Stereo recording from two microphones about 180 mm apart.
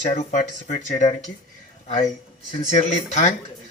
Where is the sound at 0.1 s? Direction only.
45° left (ahead or behind).